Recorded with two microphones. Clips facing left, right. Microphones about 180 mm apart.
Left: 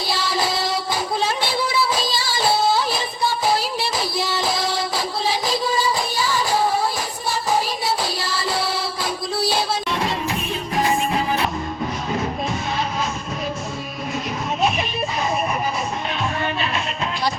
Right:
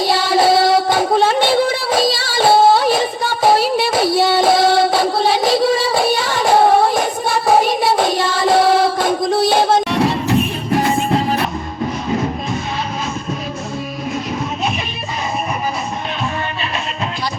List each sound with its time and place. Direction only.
0.1 s child singing: 90° right; by 11.3 s 70° right (ahead or behind)